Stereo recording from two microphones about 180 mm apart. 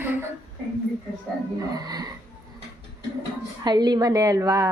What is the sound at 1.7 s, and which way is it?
Speech, 20° right (ahead or behind).